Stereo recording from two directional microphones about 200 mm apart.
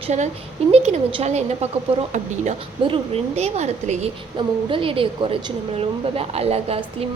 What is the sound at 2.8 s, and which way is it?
A woman's voice, 30° right (ahead or behind).